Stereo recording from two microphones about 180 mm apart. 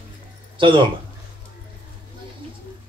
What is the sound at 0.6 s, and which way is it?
Speech, 25° right (ahead or behind).